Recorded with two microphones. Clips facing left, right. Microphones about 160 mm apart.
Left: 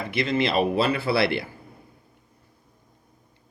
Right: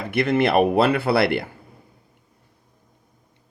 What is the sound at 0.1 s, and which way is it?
Speech, 60° right (ahead or behind).